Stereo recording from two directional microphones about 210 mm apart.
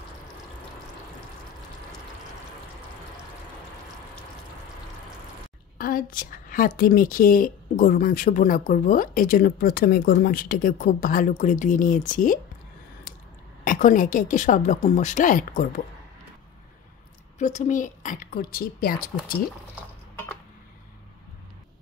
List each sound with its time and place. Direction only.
5.8 s a woman's voice: 45° left (ahead or behind)
13.7 s a woman's voice: 40° left (ahead or behind)
17.4 s a woman's voice: 35° left (ahead or behind)